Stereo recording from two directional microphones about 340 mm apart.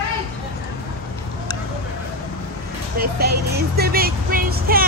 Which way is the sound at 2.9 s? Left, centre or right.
Right.